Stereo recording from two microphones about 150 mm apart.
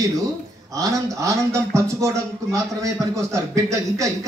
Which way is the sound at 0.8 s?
20° right (ahead or behind).